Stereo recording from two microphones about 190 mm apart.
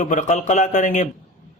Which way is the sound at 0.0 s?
40° left (ahead or behind).